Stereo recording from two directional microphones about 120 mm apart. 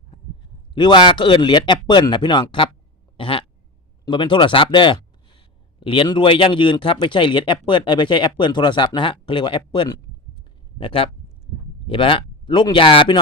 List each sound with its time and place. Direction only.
0.7 s speech: 40° left (ahead or behind)